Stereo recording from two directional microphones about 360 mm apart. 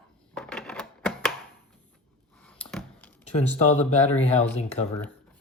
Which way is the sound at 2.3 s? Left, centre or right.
Centre.